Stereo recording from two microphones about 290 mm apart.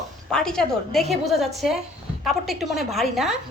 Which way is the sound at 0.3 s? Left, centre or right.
Centre.